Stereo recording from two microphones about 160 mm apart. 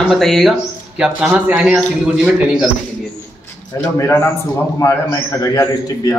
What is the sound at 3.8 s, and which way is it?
A man's voice, 20° left (ahead or behind).